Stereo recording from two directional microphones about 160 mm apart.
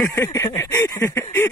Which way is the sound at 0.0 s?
15° left (ahead or behind).